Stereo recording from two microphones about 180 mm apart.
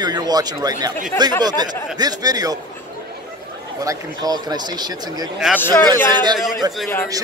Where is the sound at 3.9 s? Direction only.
20° right (ahead or behind).